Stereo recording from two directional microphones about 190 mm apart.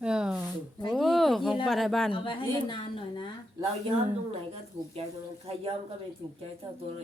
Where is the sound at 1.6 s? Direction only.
Centre (ahead or behind).